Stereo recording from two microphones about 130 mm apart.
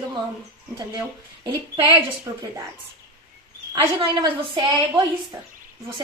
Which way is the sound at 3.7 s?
30° right (ahead or behind).